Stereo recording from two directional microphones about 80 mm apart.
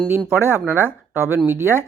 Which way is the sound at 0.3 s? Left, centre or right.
Right.